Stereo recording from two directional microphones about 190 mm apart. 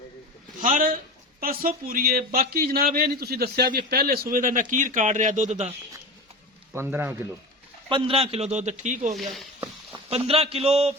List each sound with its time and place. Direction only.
0.6 s a man's voice: 45° right (ahead or behind)
6.7 s speech: 10° right (ahead or behind)
7.9 s a man's voice: 30° right (ahead or behind)
9.1 s speech: centre (ahead or behind)
10.1 s a man's voice: 30° right (ahead or behind)